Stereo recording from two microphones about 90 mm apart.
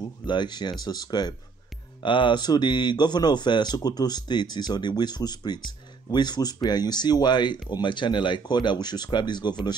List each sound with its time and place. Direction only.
0.3 s speech: 55° left (ahead or behind)
2.0 s speech: 65° left (ahead or behind)